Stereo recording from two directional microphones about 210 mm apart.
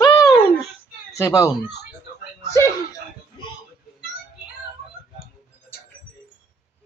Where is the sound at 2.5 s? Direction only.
15° left (ahead or behind).